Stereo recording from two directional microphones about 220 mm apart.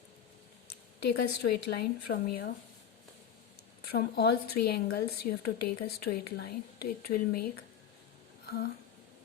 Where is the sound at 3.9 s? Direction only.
45° left (ahead or behind).